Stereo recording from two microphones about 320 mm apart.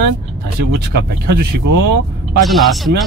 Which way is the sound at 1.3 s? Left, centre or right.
Right.